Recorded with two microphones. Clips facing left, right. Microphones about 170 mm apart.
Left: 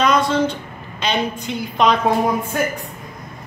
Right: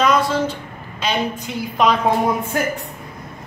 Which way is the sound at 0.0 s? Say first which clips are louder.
Left 1 dB; 5° right (ahead or behind).